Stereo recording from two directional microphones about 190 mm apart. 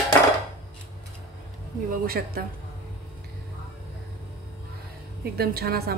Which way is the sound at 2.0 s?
50° right (ahead or behind).